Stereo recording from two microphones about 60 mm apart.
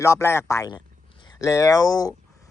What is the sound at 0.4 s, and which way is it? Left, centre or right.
Speech, left.